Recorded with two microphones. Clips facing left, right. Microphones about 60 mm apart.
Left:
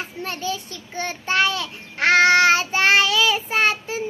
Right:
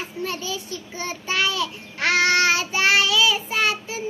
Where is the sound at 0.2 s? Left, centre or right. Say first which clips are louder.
Left 1 dB; left.